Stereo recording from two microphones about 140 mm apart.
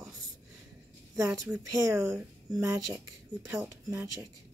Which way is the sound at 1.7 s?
20° right (ahead or behind).